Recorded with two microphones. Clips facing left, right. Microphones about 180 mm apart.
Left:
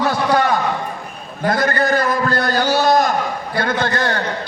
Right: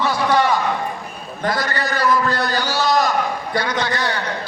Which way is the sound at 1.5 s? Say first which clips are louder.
Left 6 dB; 50° left (ahead or behind).